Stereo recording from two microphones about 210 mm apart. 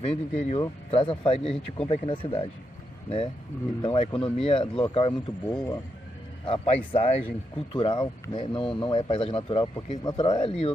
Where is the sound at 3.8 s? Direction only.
25° left (ahead or behind).